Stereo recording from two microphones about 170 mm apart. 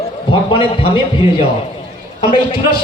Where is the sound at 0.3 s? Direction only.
35° left (ahead or behind).